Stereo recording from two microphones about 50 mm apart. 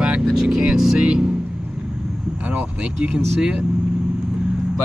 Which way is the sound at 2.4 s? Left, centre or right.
Right.